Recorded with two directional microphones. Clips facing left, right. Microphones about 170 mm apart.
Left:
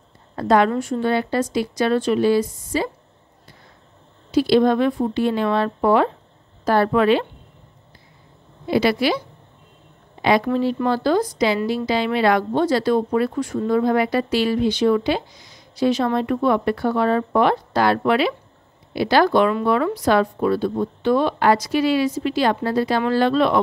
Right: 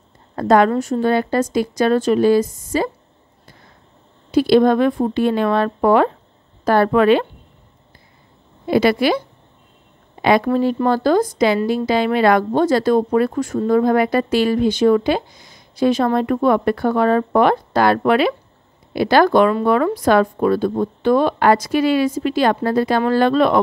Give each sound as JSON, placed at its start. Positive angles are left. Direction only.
{"t": 0.4, "sound": "a woman's voice", "side_deg": -45}
{"t": 4.3, "sound": "a woman's voice", "side_deg": -50}
{"t": 8.6, "sound": "a woman's voice", "side_deg": -50}
{"t": 10.2, "sound": "a woman's voice", "side_deg": -50}